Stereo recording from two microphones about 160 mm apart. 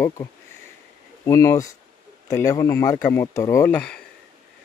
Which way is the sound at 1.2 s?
20° left (ahead or behind).